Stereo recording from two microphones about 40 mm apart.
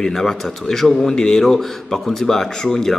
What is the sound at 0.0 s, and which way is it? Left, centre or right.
Speech, centre.